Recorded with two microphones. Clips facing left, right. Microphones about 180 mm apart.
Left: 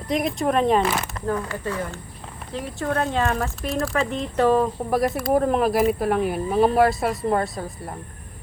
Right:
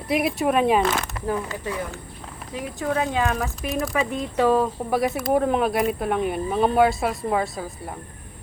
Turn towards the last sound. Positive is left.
turn(degrees=0)  # may be behind; listen again after turning